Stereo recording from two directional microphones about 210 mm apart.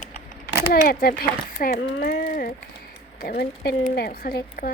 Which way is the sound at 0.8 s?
45° left (ahead or behind).